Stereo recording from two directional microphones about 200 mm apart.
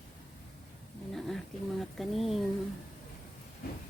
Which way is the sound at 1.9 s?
Centre (ahead or behind).